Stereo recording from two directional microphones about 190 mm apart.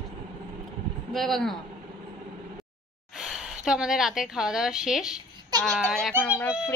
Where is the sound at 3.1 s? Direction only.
Centre (ahead or behind).